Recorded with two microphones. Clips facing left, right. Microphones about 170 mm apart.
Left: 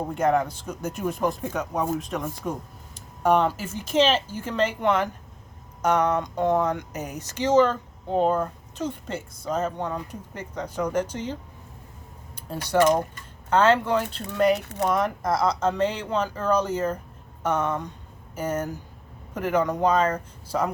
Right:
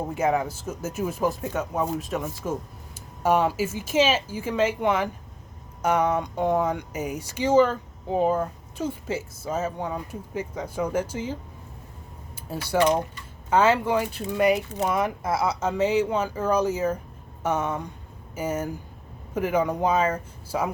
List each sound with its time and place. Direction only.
0.1 s speech: 5° right (ahead or behind)
12.5 s speech: 5° right (ahead or behind)